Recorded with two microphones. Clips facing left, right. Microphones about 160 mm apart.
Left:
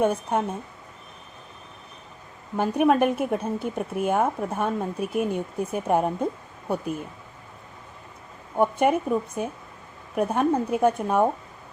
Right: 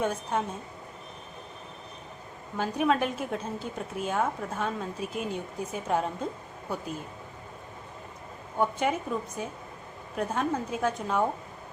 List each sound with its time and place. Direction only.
0.0 s a woman's voice: 55° left (ahead or behind)
2.6 s a woman's voice: 60° left (ahead or behind)
8.5 s a woman's voice: 60° left (ahead or behind)